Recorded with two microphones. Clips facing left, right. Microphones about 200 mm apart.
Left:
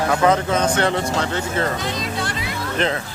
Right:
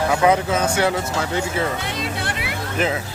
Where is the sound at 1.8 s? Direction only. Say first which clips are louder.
Left 1 dB; 60° right (ahead or behind).